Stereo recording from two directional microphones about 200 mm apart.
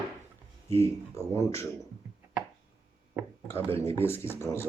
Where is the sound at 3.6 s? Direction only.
30° right (ahead or behind).